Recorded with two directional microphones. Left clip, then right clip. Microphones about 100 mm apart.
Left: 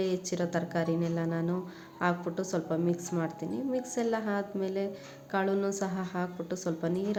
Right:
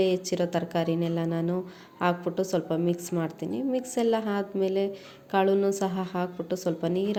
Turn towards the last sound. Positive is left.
turn(degrees=-30)  # may be behind; listen again after turning